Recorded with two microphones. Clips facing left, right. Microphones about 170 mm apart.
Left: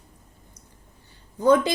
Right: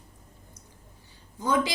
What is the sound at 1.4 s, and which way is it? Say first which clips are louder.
Speech: left 8 dB; 60° left (ahead or behind).